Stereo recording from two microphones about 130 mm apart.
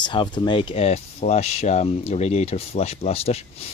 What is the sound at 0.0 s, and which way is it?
Speech, 35° left (ahead or behind).